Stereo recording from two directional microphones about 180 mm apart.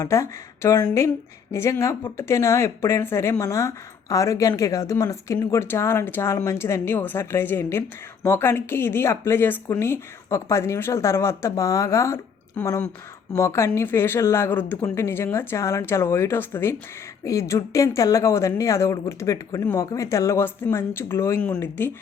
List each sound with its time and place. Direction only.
0.0 s speech: 15° left (ahead or behind)